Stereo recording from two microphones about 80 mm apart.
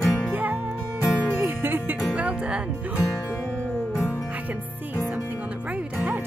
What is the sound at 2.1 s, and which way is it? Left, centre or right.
Music, centre.